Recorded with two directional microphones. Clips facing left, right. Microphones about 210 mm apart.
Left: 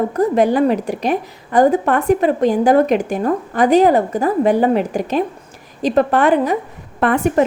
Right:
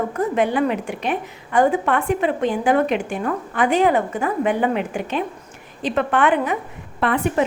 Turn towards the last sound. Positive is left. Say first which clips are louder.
# left 5 dB
turn(degrees=45)  # may be behind; listen again after turning